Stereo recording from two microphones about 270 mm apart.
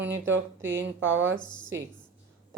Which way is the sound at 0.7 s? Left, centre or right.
Right.